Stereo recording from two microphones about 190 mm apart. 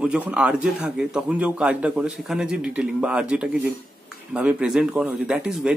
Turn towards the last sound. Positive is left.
turn(degrees=-5)  # may be behind; listen again after turning